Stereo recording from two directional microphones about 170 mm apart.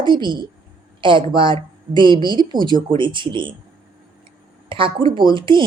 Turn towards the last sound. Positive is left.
turn(degrees=-30)  # may be behind; listen again after turning